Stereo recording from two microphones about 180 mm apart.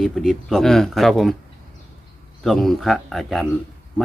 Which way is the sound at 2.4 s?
Centre (ahead or behind).